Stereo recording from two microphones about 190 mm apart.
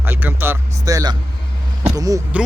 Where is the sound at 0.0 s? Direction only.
10° right (ahead or behind).